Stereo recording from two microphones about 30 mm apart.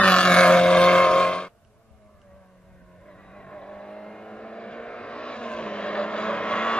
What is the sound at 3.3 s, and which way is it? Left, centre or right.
Vehicle, left.